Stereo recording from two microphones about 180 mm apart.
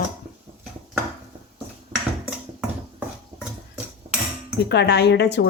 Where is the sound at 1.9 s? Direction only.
30° right (ahead or behind).